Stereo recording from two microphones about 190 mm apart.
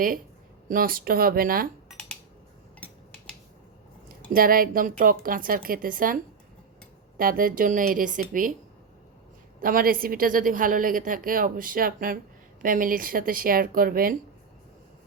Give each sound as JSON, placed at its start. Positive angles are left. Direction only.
{"t": 0.7, "sound": "a woman's voice", "side_deg": -50}
{"t": 1.9, "sound": "dishes", "side_deg": 5}
{"t": 4.3, "sound": "a woman's voice", "side_deg": -50}
{"t": 7.2, "sound": "a woman's voice", "side_deg": -50}
{"t": 9.6, "sound": "a woman's voice", "side_deg": -45}